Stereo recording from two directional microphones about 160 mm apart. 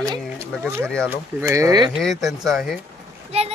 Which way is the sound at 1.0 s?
20° right (ahead or behind).